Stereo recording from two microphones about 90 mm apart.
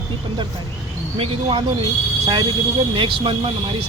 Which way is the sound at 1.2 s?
85° right.